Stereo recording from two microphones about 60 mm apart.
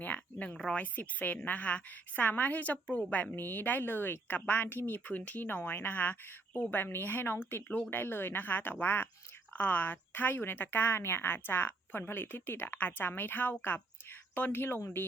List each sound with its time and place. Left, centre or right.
0.0 s a sound: left
0.5 s speech: centre
0.8 s a woman's voice: left
3.3 s a woman's voice: left